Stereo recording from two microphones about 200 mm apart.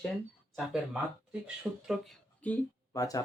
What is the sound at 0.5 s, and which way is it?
Speech, centre (ahead or behind).